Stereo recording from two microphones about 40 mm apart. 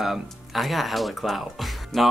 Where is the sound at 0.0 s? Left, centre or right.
Centre.